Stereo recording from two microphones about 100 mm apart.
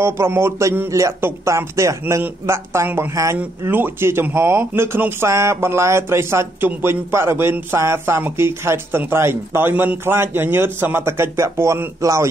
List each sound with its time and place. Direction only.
0.0 s speech: 25° right (ahead or behind)